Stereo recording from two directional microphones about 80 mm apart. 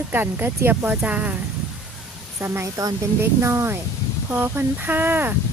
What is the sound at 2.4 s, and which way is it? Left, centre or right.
Speech, right.